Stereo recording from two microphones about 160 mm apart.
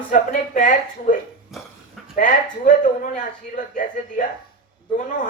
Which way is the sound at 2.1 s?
55° left (ahead or behind).